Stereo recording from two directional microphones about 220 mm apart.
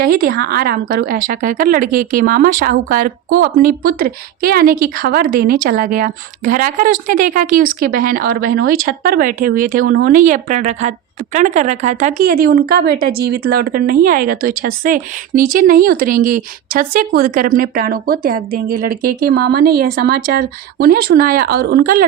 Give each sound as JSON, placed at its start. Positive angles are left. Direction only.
{"t": 0.0, "sound": "speech", "side_deg": -45}